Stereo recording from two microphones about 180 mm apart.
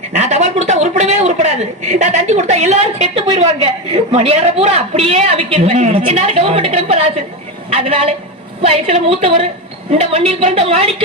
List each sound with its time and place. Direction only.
0.2 s a woman's voice: 40° right (ahead or behind)